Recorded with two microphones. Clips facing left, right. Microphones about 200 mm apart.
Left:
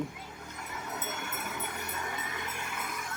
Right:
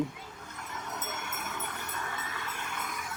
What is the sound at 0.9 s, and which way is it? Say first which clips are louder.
Music: left 1 dB; centre (ahead or behind).